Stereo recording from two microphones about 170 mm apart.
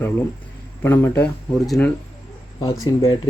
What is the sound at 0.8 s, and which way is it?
Speech, 15° left (ahead or behind).